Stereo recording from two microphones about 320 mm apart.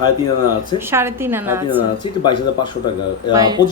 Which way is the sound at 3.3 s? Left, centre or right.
Centre.